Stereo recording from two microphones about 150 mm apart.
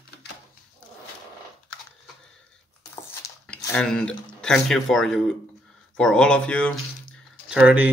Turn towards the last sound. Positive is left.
turn(degrees=-10)  # may be behind; listen again after turning